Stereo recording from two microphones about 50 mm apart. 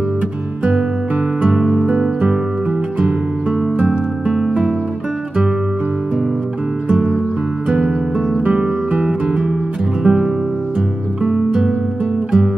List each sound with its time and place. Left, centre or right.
1.4 s music: centre
3.7 s music: right
4.3 s music: centre
6.9 s music: centre
8.5 s guitar: centre
10.0 s music: centre